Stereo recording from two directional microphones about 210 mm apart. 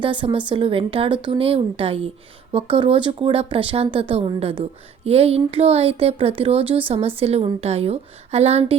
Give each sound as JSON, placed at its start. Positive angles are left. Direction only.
{"t": 0.0, "sound": "speech", "side_deg": -25}